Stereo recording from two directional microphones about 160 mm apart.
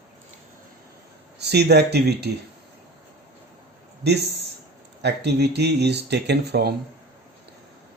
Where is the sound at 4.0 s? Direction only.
90° right.